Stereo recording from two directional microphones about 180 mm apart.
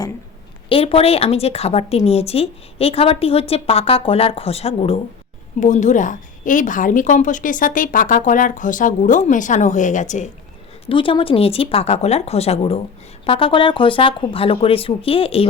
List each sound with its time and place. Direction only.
0.7 s a woman's voice: 30° left (ahead or behind)
10.8 s speech: 30° left (ahead or behind)